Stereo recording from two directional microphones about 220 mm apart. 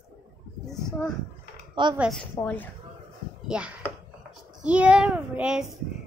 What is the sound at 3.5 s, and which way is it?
A woman's voice, 5° right (ahead or behind).